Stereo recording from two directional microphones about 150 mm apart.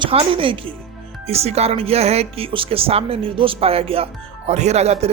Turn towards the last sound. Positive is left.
turn(degrees=-45)  # may be behind; listen again after turning